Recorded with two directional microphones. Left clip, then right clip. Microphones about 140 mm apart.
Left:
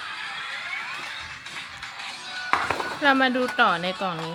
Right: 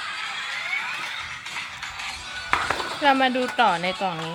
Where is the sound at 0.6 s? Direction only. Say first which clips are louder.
Right 4 dB; 40° right (ahead or behind).